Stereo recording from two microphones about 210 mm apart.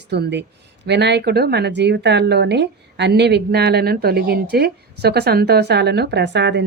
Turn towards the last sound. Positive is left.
turn(degrees=-55)  # may be behind; listen again after turning